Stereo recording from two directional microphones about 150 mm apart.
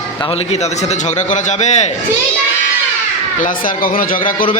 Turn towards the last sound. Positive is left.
turn(degrees=65)  # may be behind; listen again after turning